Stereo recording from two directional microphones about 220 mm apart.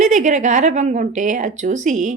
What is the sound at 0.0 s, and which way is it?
A woman's voice, 35° right (ahead or behind).